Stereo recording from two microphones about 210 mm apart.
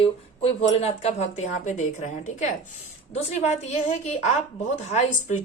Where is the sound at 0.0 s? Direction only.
30° left (ahead or behind).